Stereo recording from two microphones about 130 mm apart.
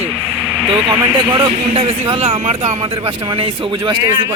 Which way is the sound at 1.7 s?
50° right (ahead or behind).